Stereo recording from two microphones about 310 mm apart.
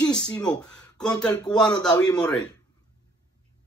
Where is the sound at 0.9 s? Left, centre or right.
Centre.